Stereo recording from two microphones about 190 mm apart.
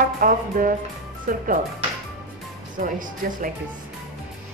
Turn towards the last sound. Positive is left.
turn(degrees=-45)  # may be behind; listen again after turning